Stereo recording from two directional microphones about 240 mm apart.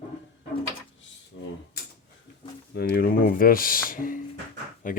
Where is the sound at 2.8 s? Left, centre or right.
Left.